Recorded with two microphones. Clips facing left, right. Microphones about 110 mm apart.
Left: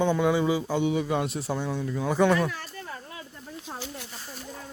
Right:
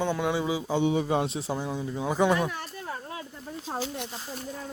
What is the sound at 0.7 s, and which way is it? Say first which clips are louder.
Speech: right 1 dB; 30° right (ahead or behind).